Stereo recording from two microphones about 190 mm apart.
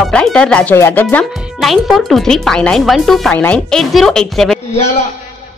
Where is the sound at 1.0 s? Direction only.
Centre (ahead or behind).